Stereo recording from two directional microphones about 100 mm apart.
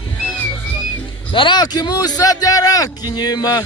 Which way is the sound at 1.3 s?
55° left (ahead or behind).